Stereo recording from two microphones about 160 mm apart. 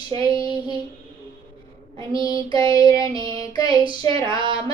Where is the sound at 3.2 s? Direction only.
30° right (ahead or behind).